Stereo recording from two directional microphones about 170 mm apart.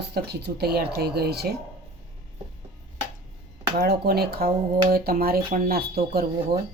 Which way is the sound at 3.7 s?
70° right (ahead or behind).